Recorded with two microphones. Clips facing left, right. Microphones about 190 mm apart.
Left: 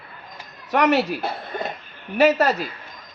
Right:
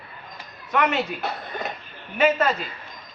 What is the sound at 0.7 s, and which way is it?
Speech, 40° left (ahead or behind).